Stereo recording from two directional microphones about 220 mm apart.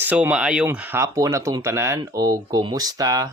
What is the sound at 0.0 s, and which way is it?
Speech, 5° right (ahead or behind).